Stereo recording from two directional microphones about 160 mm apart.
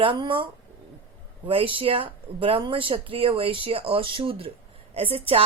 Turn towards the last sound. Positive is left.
turn(degrees=-35)  # may be behind; listen again after turning